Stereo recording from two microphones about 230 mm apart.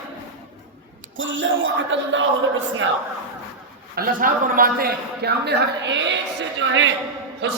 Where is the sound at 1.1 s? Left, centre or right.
Right.